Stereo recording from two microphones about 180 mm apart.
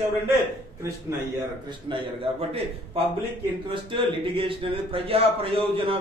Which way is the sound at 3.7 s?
30° right (ahead or behind).